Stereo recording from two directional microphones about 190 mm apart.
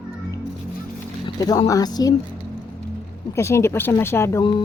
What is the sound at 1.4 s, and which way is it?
Speech, 20° left (ahead or behind).